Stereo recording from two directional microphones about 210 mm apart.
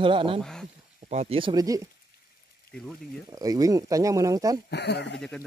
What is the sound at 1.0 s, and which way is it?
Speech, 30° right (ahead or behind).